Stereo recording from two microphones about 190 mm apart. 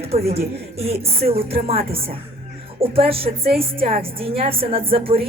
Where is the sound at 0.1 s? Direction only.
30° right (ahead or behind).